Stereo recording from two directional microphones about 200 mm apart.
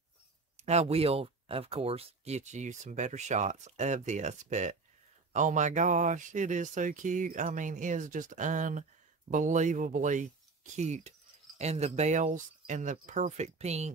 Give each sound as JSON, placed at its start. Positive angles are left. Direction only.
{"t": 0.6, "sound": "speech", "side_deg": -35}